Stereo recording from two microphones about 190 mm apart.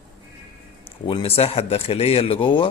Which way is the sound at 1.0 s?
30° left (ahead or behind).